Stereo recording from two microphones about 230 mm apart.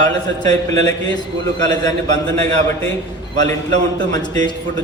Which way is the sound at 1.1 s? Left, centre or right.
Centre.